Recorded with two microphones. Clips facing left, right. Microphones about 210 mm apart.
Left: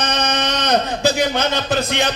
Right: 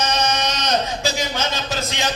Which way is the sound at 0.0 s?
60° left (ahead or behind).